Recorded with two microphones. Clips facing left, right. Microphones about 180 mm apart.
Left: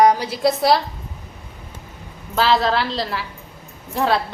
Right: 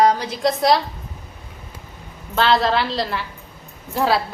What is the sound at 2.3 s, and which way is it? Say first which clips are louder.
A woman's voice: even; centre (ahead or behind).